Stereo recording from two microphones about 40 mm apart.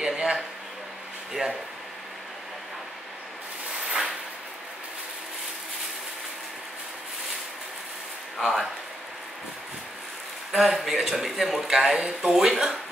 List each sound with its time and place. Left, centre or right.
0.0 s a sound: centre
1.3 s speech: centre
8.4 s speech: centre
10.5 s speech: centre
12.0 s speech: centre
12.3 s speech: centre